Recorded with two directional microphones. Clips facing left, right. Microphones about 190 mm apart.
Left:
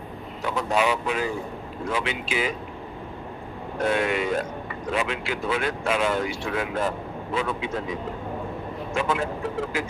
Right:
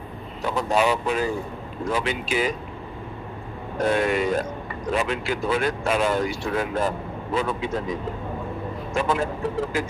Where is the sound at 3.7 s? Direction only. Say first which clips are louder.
Right 2 dB; 40° right (ahead or behind).